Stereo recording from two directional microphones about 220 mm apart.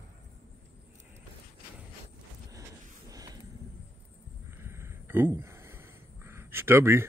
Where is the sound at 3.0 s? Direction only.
15° right (ahead or behind).